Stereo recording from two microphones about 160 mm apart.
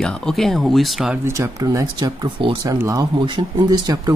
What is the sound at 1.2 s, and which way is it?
Speech, 20° right (ahead or behind).